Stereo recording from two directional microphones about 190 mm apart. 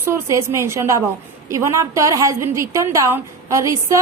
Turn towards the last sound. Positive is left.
turn(degrees=-15)  # may be behind; listen again after turning